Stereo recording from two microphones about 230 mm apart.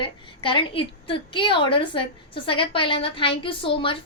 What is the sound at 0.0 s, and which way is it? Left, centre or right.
A woman's voice, left.